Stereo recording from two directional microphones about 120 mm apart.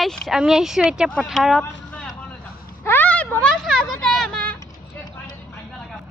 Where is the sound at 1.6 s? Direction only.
10° left (ahead or behind).